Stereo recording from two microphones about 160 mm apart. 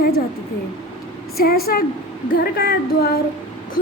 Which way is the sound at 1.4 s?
70° left (ahead or behind).